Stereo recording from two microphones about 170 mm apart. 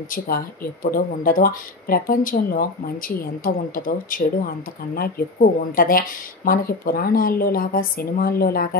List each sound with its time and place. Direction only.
0.9 s speech: 55° left (ahead or behind)